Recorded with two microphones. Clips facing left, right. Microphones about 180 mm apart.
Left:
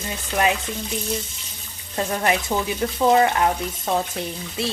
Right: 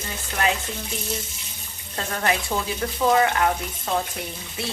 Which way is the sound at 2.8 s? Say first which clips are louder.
Left 3 dB; 20° left (ahead or behind).